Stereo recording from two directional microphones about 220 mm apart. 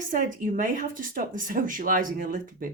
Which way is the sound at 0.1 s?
35° right (ahead or behind).